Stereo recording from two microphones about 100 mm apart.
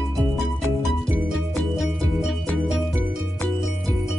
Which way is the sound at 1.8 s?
Centre (ahead or behind).